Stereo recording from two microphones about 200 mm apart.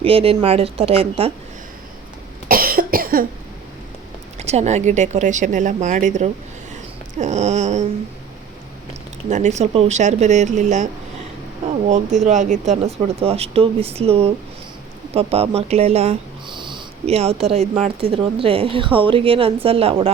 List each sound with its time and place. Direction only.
0.0 s speech: 30° right (ahead or behind)
2.5 s cough: 45° right (ahead or behind)
4.4 s speech: 35° right (ahead or behind)
9.3 s speech: 35° right (ahead or behind)
11.9 s speech: 35° right (ahead or behind)